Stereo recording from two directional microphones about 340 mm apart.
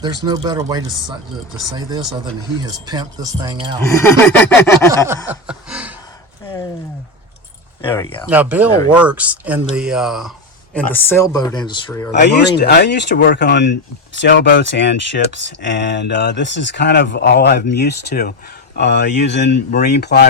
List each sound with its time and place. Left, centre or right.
0.0 s speech: centre
3.8 s speech: centre
5.3 s a sound: centre
8.3 s speech: centre
12.2 s speech: left